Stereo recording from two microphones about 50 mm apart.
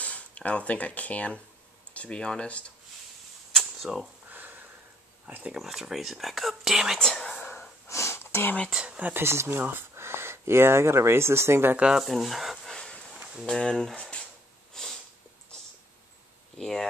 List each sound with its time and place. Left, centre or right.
0.0 s speech: left
3.5 s camera: centre
4.3 s sniff: right
5.2 s speech: right
5.6 s speech: centre
7.0 s speech: centre
7.9 s sniff: left
8.7 s a sound: centre
9.1 s speech: right
11.8 s speech: centre
12.6 s a sound: centre
13.5 s speech: centre
14.7 s sniff: centre
16.5 s speech: centre